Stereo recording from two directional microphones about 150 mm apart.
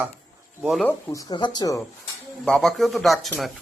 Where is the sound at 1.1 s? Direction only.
25° left (ahead or behind).